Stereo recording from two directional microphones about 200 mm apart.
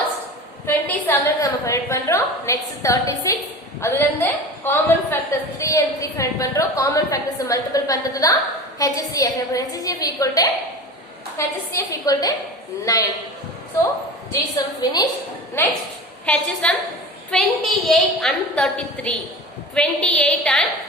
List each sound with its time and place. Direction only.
0.6 s a woman's voice: 10° left (ahead or behind)
14.5 s a woman's voice: 20° left (ahead or behind); by 20.7 s 5° left (ahead or behind)